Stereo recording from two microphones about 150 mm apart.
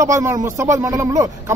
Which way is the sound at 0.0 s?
20° right (ahead or behind).